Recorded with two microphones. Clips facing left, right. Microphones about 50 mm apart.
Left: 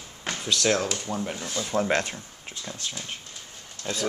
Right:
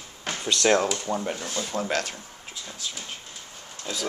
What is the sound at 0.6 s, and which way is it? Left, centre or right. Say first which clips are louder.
Speech: right 5 dB; centre.